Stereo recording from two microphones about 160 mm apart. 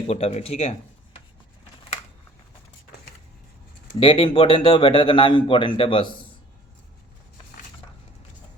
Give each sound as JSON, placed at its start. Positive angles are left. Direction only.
{"t": 0.1, "sound": "a man's voice", "side_deg": 40}
{"t": 4.0, "sound": "a man's voice", "side_deg": 35}